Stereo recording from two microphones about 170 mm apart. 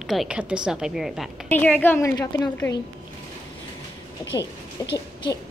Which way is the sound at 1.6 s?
10° left (ahead or behind).